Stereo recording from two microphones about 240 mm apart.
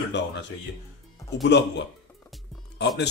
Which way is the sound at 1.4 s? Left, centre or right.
Left.